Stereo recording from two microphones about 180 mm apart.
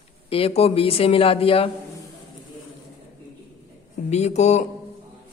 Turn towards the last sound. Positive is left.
turn(degrees=40)  # may be behind; listen again after turning